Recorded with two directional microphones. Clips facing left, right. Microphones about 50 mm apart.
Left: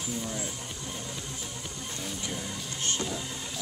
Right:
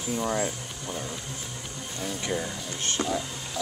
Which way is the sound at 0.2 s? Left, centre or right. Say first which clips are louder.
Right 9 dB; right.